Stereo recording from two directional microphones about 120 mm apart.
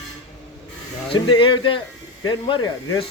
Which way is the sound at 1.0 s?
45° left (ahead or behind).